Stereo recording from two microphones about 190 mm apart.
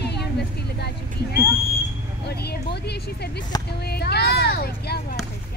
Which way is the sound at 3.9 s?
60° left (ahead or behind).